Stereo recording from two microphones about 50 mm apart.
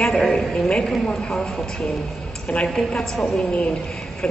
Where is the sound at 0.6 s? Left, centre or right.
Centre.